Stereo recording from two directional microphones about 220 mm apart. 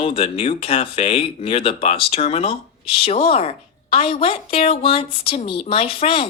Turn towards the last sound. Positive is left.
turn(degrees=25)  # may be behind; listen again after turning